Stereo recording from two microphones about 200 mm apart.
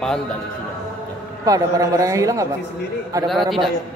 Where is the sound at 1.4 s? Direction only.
15° right (ahead or behind).